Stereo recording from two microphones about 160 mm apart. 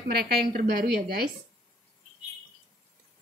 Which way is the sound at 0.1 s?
75° right (ahead or behind).